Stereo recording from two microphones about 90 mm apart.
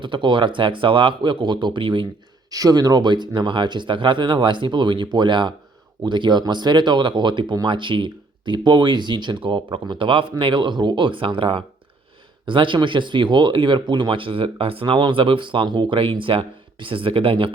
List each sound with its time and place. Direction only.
0.0 s speech: 65° right (ahead or behind)
2.5 s speech: 45° right (ahead or behind); by 17.5 s 80° right